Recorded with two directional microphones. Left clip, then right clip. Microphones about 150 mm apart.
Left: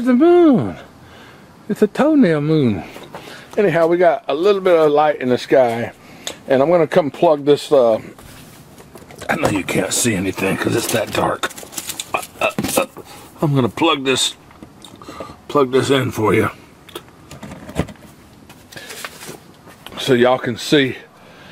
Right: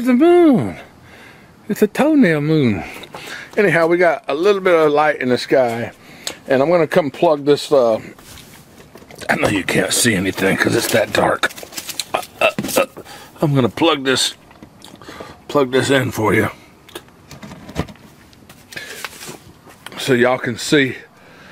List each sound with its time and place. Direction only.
0.0 s speech: 20° right (ahead or behind)
9.2 s speech: 20° right (ahead or behind)
12.1 s a sound: 20° right (ahead or behind)
13.4 s speech: 20° right (ahead or behind)
15.0 s a sound: 25° right (ahead or behind)
19.8 s speech: 20° right (ahead or behind)